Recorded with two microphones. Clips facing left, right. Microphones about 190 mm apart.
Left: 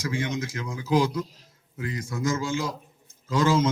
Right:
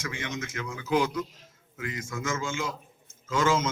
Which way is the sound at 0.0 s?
35° left (ahead or behind).